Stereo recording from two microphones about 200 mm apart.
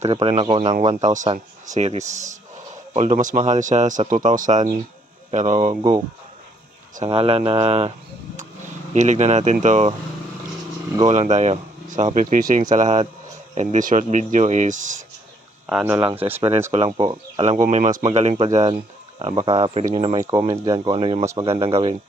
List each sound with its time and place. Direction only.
0.0 s speech: 30° right (ahead or behind)
6.9 s speech: 30° right (ahead or behind)
9.0 s speech: 35° right (ahead or behind)
11.1 s speech: 35° right (ahead or behind)
15.6 s speech: 5° right (ahead or behind)
16.7 s speech: 30° right (ahead or behind)